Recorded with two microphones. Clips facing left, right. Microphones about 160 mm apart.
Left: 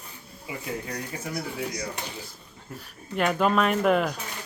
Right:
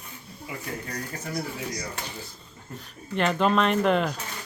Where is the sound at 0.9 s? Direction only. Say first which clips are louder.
Left 1 dB; 10° left (ahead or behind).